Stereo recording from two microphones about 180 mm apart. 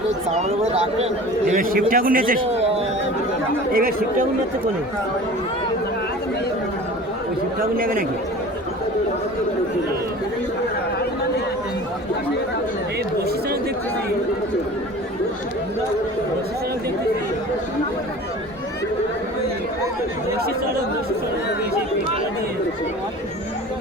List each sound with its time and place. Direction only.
0.3 s speech: 40° right (ahead or behind)
1.5 s speech: 50° right (ahead or behind)
2.4 s a man's voice: 35° right (ahead or behind)
3.7 s speech: 50° right (ahead or behind)
7.8 s speech: 55° right (ahead or behind)